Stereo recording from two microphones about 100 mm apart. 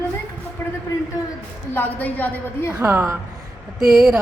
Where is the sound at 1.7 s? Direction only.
20° left (ahead or behind).